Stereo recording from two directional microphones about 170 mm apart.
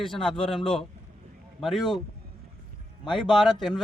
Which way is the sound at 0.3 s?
30° left (ahead or behind).